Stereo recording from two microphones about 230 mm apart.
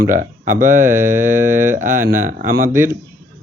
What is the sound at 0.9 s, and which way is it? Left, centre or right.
Mantra, centre.